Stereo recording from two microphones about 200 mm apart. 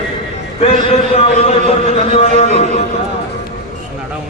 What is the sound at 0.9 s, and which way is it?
Speech, 30° left (ahead or behind).